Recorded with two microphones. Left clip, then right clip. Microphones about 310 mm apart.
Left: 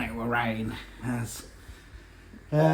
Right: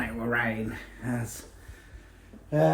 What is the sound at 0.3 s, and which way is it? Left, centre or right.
Speech, centre.